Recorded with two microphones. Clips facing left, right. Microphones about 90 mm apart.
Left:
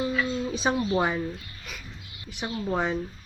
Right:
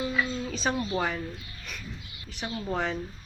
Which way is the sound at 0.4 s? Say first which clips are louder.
Left 3 dB; 15° left (ahead or behind).